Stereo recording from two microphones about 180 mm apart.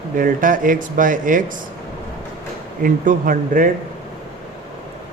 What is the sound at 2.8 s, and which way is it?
Speech, 50° right (ahead or behind).